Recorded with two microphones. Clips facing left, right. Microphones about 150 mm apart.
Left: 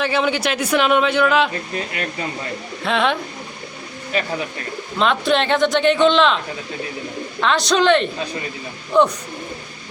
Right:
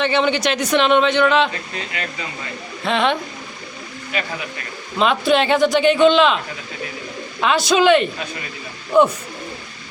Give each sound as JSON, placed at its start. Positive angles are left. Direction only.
{"t": 0.0, "sound": "speech", "side_deg": 5}
{"t": 2.8, "sound": "speech", "side_deg": 0}
{"t": 4.1, "sound": "speech", "side_deg": 35}
{"t": 4.9, "sound": "speech", "side_deg": -5}
{"t": 7.4, "sound": "speech", "side_deg": -5}